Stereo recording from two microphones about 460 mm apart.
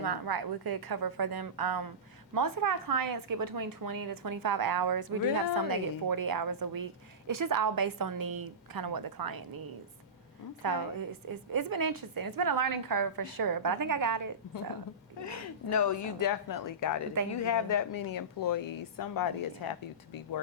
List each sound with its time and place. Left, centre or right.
0.0 s a woman's voice: right
10.6 s a woman's voice: right
15.2 s speech: left